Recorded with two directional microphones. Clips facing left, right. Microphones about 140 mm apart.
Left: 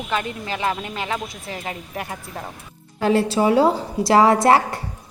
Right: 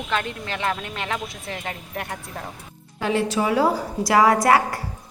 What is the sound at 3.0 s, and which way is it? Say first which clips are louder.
A woman's voice: left 4 dB; 40° left (ahead or behind).